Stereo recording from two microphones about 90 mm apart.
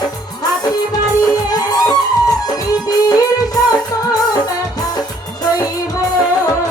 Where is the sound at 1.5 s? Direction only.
45° left (ahead or behind).